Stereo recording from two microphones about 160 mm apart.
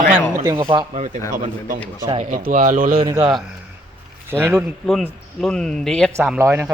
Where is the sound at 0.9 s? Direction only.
45° right (ahead or behind).